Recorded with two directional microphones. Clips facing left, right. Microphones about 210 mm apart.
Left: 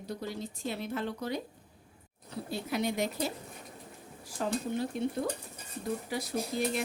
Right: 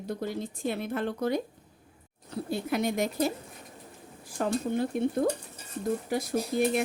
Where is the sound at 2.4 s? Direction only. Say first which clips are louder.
Right 4 dB; 50° right (ahead or behind).